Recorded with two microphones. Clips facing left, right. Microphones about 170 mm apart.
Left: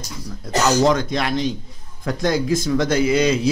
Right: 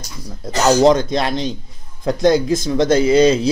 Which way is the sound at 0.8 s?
30° right (ahead or behind).